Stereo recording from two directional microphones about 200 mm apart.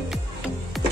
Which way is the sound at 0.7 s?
Centre (ahead or behind).